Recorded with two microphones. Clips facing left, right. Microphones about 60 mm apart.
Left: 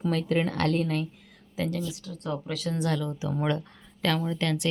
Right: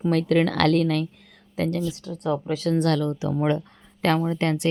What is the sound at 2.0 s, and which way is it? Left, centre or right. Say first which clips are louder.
Speech: right 7 dB; right.